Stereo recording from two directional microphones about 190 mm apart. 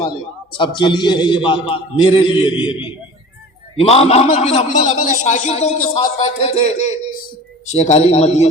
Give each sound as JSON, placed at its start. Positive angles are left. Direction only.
{"t": 0.5, "sound": "a man's voice", "side_deg": 25}